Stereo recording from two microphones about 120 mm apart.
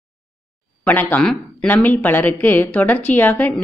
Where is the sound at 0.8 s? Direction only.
15° left (ahead or behind).